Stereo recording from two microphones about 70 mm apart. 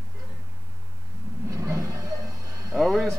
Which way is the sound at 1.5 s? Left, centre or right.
Right.